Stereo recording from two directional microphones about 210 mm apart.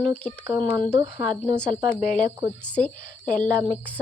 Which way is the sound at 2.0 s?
45° left (ahead or behind).